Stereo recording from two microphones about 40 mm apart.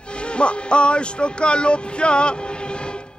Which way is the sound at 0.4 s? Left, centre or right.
Left.